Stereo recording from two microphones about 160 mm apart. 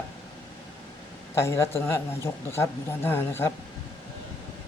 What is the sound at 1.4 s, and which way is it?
A woman's voice, 15° left (ahead or behind).